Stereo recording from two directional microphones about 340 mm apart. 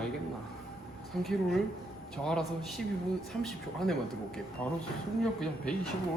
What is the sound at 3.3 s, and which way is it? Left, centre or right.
Speech, centre.